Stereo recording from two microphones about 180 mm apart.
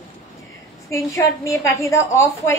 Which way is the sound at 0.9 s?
15° left (ahead or behind).